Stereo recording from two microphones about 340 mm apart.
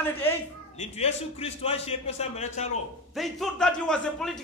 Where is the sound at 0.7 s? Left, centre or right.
Centre.